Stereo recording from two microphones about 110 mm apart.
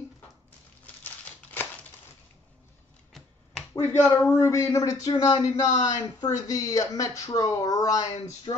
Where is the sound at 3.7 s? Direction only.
20° left (ahead or behind).